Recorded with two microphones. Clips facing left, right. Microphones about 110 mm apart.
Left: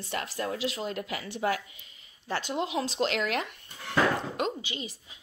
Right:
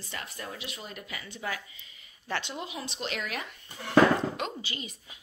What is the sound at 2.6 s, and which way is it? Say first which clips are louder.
Speech: left 8 dB; 85° left.